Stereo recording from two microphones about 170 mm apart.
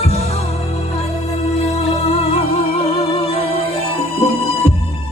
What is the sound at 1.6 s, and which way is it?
Music, 35° left (ahead or behind).